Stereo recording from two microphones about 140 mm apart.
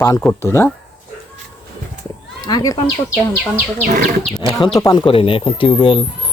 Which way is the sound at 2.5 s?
25° left (ahead or behind).